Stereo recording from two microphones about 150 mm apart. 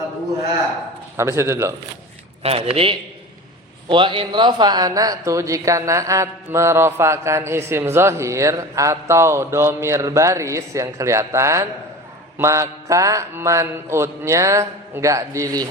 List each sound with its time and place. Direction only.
1.1 s a man's voice: 15° right (ahead or behind)
2.4 s speech: 40° right (ahead or behind)
3.8 s speech: 35° right (ahead or behind)